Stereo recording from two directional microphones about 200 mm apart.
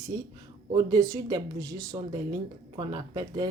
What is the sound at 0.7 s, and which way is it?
Speech, 20° right (ahead or behind).